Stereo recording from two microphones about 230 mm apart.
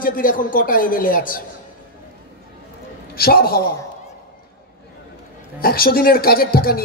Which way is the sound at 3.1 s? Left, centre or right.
Left.